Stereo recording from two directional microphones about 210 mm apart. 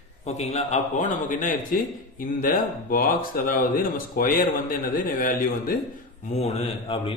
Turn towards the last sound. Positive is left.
turn(degrees=25)  # may be behind; listen again after turning